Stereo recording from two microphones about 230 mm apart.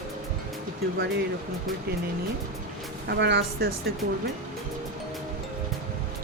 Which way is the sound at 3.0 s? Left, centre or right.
Right.